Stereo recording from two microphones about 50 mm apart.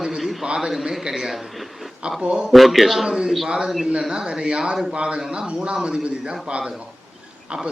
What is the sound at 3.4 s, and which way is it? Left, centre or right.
A man's voice, centre.